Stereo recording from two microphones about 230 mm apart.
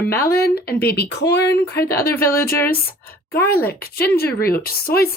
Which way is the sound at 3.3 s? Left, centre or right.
Left.